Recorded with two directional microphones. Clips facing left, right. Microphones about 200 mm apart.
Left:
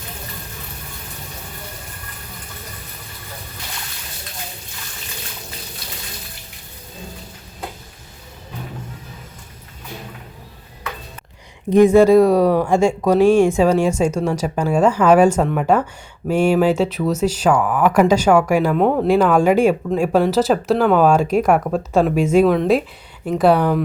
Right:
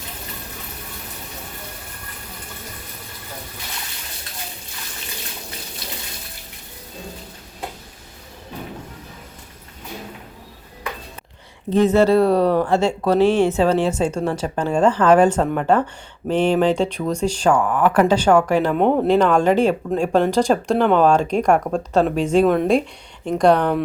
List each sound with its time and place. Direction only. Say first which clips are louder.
11.7 s speech: left 4 dB; 10° left (ahead or behind)
19.0 s speech: left 3 dB; 10° left (ahead or behind)